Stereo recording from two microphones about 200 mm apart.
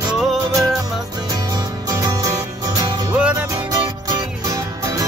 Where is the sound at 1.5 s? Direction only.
20° right (ahead or behind).